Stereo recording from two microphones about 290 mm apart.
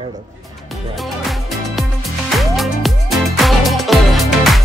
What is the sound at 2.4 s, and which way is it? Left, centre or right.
Music, centre.